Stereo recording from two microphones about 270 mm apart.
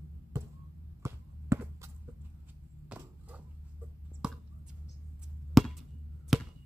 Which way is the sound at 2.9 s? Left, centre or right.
Centre.